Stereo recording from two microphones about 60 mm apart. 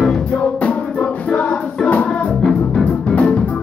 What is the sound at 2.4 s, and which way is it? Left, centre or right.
Music, centre.